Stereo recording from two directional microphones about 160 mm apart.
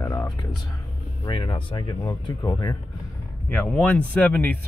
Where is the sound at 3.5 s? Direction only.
10° left (ahead or behind).